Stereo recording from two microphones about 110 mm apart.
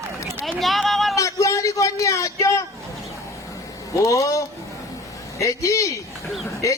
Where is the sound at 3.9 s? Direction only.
30° left (ahead or behind).